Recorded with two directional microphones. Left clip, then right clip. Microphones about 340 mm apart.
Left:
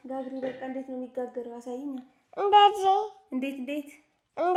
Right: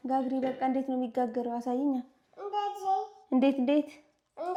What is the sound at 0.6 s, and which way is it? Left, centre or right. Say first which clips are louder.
A woman's voice: right 6 dB; right.